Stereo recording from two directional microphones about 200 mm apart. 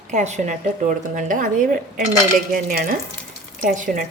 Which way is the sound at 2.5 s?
45° right (ahead or behind).